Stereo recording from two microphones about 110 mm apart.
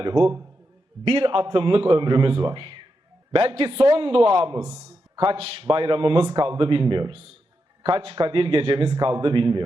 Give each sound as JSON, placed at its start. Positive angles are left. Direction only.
{"t": 0.0, "sound": "a man's voice", "side_deg": -45}